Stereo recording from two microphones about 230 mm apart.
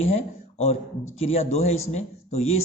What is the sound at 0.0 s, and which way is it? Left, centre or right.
A man's voice, left.